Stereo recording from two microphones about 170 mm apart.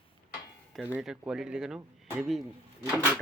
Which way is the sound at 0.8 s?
10° right (ahead or behind).